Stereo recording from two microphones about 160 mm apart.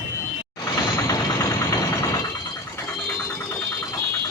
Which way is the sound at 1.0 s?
20° left (ahead or behind).